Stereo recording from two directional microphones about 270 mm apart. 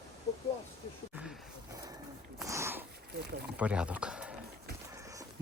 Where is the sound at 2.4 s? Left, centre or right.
Centre.